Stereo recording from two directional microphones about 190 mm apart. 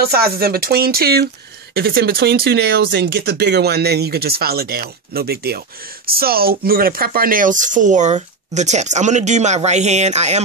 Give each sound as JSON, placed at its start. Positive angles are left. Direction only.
{"t": 0.0, "sound": "speech", "side_deg": -55}